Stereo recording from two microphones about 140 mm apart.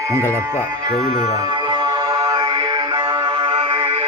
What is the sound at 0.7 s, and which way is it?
Music, 40° right (ahead or behind).